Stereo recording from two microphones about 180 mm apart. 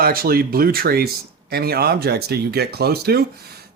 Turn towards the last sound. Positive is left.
turn(degrees=-60)  # may be behind; listen again after turning